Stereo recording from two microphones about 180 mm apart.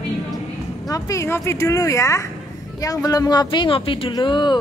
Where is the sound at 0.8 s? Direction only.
20° left (ahead or behind).